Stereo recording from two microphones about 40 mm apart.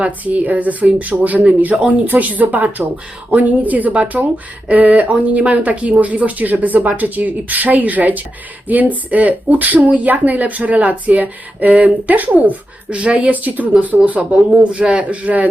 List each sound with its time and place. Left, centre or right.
0.0 s speech: right
12.9 s speech: right
13.3 s speech: right